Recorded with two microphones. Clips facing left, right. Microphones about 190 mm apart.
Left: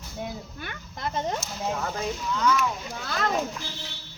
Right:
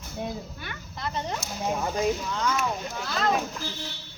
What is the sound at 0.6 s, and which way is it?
Speech, 50° left (ahead or behind).